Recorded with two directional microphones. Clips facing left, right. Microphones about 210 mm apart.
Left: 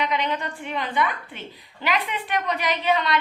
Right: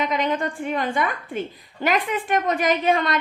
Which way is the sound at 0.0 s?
45° right (ahead or behind).